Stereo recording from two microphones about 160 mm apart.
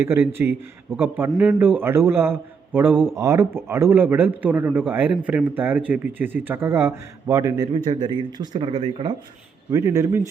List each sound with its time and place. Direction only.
0.0 s a man's voice: 15° right (ahead or behind); by 9.1 s 30° right (ahead or behind)
9.6 s speech: 20° right (ahead or behind)